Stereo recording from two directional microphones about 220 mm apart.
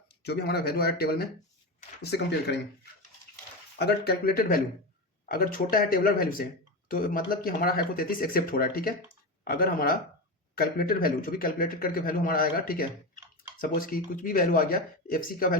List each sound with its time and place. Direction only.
0.3 s speech: 45° left (ahead or behind)
3.8 s a man's voice: 45° left (ahead or behind)